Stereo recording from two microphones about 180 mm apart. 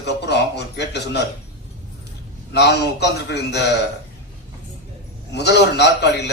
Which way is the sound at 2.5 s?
70° left (ahead or behind).